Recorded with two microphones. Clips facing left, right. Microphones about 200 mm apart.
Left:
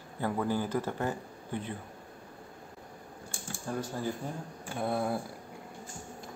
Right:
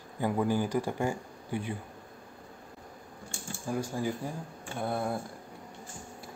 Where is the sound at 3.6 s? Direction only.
10° right (ahead or behind).